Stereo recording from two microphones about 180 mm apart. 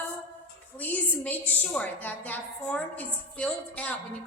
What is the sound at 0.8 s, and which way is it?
A woman's voice, 10° left (ahead or behind).